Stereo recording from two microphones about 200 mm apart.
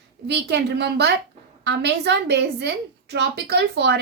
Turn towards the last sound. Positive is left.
turn(degrees=-55)  # may be behind; listen again after turning